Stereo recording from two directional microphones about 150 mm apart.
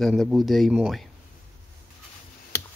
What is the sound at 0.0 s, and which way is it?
Speech, centre (ahead or behind).